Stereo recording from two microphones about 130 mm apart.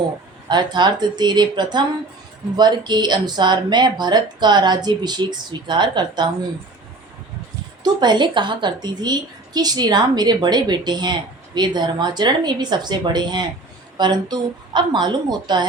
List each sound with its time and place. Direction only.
0.4 s a woman's voice: 35° right (ahead or behind)
7.9 s a woman's voice: 35° right (ahead or behind)